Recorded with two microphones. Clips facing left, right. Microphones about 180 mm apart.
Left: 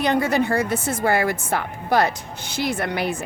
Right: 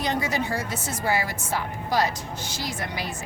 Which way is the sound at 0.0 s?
60° left (ahead or behind).